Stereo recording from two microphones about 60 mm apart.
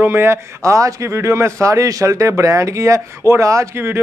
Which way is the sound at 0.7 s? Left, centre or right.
Right.